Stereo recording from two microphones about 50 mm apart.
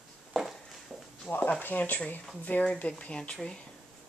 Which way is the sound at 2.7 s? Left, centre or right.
Left.